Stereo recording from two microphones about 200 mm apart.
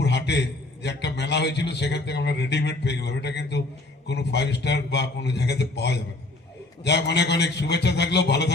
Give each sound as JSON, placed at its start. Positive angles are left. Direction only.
{"t": 0.0, "sound": "a man's voice", "side_deg": 60}